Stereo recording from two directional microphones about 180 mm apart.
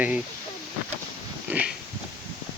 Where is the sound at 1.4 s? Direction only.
10° right (ahead or behind).